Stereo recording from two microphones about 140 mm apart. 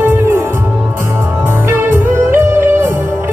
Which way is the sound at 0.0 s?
15° right (ahead or behind).